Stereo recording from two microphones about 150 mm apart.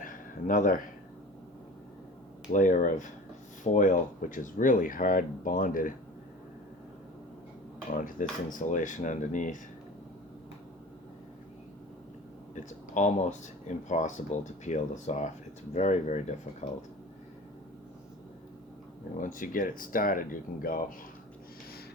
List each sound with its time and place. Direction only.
0.0 s a sound: 65° left (ahead or behind)
2.5 s speech: 60° left (ahead or behind)
7.9 s speech: 65° left (ahead or behind)
12.9 s speech: 55° left (ahead or behind)
19.1 s speech: 60° left (ahead or behind)